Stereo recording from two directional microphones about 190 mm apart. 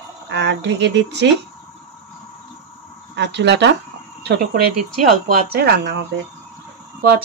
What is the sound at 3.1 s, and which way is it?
Speech, 65° right (ahead or behind).